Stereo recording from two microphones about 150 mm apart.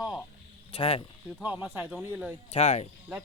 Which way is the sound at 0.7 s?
35° left (ahead or behind).